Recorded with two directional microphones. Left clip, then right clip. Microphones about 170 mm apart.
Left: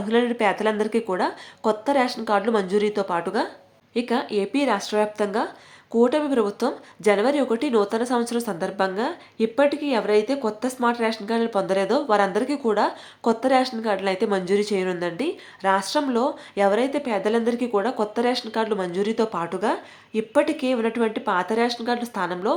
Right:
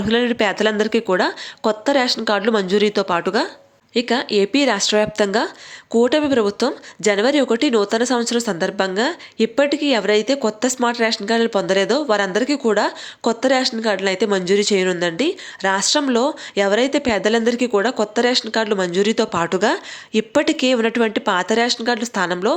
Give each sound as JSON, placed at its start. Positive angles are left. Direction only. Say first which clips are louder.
{"t": 0.0, "sound": "speech", "louder": "right 3 dB", "side_deg": -25}